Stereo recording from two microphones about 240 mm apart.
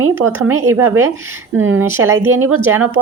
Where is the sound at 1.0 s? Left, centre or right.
Centre.